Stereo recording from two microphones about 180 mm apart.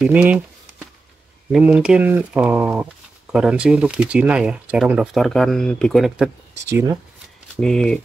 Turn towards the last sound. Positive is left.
turn(degrees=5)  # may be behind; listen again after turning